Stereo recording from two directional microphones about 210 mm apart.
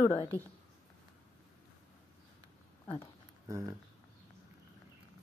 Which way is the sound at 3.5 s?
15° right (ahead or behind).